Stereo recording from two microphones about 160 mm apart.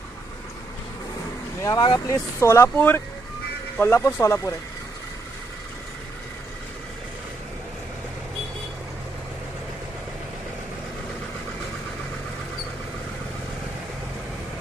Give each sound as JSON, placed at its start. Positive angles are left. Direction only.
{"t": 1.6, "sound": "speech", "side_deg": 25}